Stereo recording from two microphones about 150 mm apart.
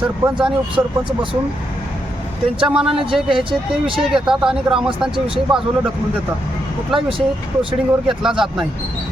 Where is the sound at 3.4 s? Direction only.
35° right (ahead or behind).